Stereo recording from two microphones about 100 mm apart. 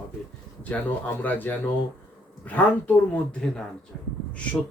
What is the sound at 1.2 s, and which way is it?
Speech, 20° left (ahead or behind).